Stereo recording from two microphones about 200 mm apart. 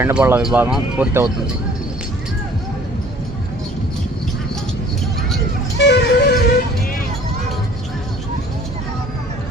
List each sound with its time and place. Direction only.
0.0 s speech: 10° right (ahead or behind)
5.7 s music: 60° left (ahead or behind)